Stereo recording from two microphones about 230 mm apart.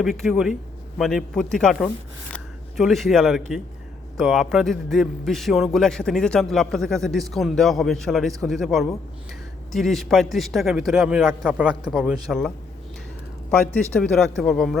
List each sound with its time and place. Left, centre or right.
0.0 s a man's voice: centre
2.3 s a sound: centre
4.2 s a man's voice: centre
13.5 s a man's voice: centre